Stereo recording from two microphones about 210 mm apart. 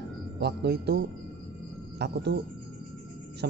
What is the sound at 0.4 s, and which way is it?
Speech, 50° right (ahead or behind).